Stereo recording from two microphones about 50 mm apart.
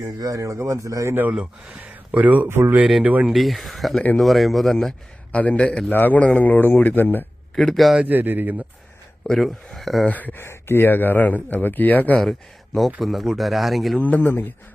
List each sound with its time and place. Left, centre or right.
0.0 s speech: right
1.3 s speech: right
3.3 s speech: centre
5.3 s a man's voice: left
5.9 s speech: left
7.5 s speech: centre
8.0 s speech: right
9.2 s speech: centre
10.1 s speech: left
10.3 s speech: left
12.1 s speech: centre
14.0 s speech: left